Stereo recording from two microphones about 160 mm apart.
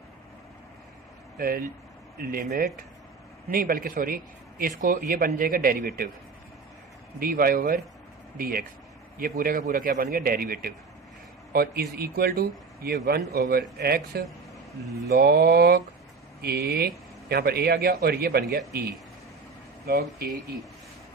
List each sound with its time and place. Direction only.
1.4 s a man's voice: 65° right (ahead or behind)
7.2 s a man's voice: 65° right (ahead or behind)